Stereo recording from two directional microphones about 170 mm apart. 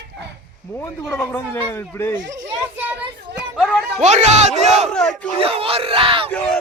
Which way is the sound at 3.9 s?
40° right (ahead or behind).